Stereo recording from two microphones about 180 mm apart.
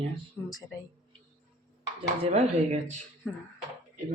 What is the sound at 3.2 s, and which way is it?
Speech, centre (ahead or behind).